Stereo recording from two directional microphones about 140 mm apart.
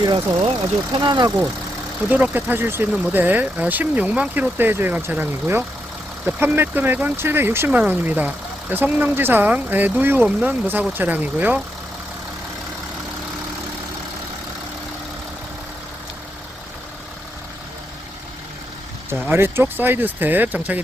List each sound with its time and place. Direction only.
0.0 s speech: 30° right (ahead or behind)
2.0 s speech: 10° right (ahead or behind)
19.2 s speech: 15° right (ahead or behind)